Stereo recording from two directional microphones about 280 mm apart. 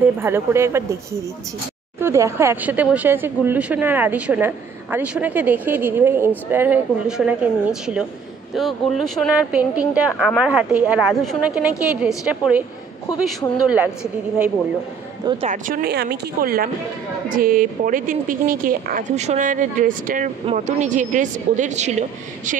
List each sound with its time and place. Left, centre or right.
0.0 s speech: centre
2.0 s a woman's voice: centre
13.7 s a woman's voice: centre
15.2 s a woman's voice: right